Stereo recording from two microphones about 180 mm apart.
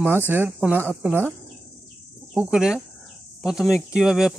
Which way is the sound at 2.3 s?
5° right (ahead or behind).